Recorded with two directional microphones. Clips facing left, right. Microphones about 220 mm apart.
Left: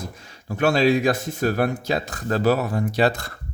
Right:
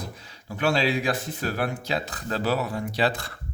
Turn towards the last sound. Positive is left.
turn(degrees=45)  # may be behind; listen again after turning